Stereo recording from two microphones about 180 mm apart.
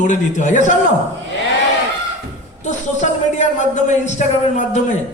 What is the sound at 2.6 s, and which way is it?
A man's voice, 40° left (ahead or behind).